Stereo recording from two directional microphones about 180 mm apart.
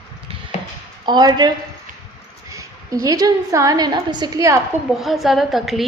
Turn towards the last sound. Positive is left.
turn(degrees=0)  # may be behind; listen again after turning